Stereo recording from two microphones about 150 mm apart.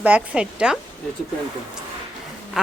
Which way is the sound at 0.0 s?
10° right (ahead or behind).